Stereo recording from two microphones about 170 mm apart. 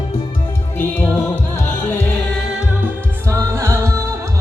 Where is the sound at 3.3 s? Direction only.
15° right (ahead or behind).